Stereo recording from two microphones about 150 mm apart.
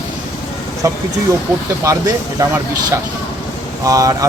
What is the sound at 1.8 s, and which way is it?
Speech, 20° right (ahead or behind).